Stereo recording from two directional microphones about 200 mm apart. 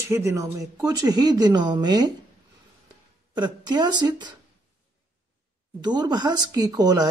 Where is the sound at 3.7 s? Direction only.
20° right (ahead or behind).